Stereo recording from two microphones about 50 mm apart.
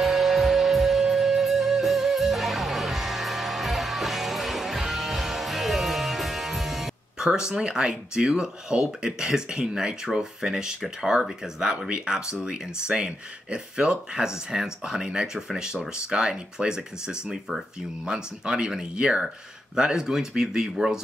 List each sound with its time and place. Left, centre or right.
0.0 s music: centre
7.2 s speech: centre